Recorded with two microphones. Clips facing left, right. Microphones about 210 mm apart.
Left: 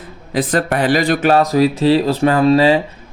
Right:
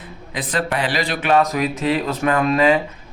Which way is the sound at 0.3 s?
45° left (ahead or behind).